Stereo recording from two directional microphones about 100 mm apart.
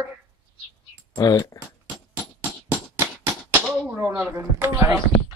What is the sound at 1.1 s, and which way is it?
Speech, 40° left (ahead or behind).